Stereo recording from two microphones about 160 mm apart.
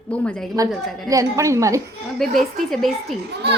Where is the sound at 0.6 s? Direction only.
20° right (ahead or behind).